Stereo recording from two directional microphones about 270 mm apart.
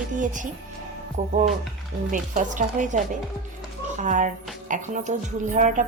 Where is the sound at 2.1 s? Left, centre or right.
Right.